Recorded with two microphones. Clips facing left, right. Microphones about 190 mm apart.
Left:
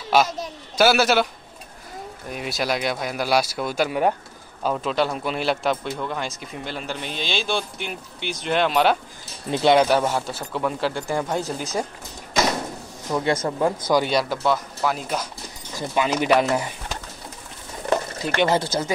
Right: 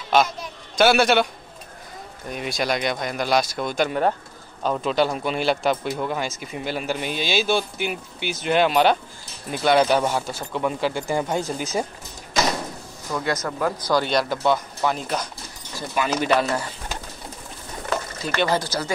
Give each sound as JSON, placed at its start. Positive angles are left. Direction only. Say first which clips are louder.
{"t": 0.7, "sound": "a man's voice", "louder": "right 1 dB", "side_deg": 5}
{"t": 9.5, "sound": "speech", "louder": "left 3 dB", "side_deg": 25}
{"t": 9.8, "sound": "a man's voice", "louder": "even", "side_deg": 0}
{"t": 13.1, "sound": "speech", "louder": "left 3 dB", "side_deg": 25}
{"t": 14.0, "sound": "a man's voice", "louder": "right 1 dB", "side_deg": 5}
{"t": 15.9, "sound": "speech", "louder": "left 2 dB", "side_deg": 20}
{"t": 18.4, "sound": "speech", "louder": "left 2 dB", "side_deg": 25}